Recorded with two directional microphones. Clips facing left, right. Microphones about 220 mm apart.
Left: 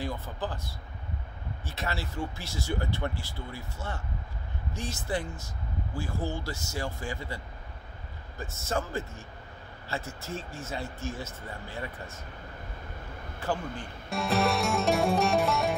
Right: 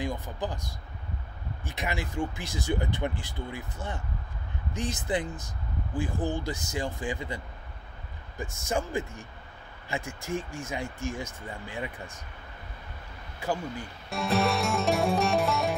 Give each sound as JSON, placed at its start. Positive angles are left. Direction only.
{"t": 0.0, "sound": "speech", "side_deg": -15}
{"t": 13.4, "sound": "speech", "side_deg": -10}
{"t": 14.0, "sound": "music", "side_deg": 0}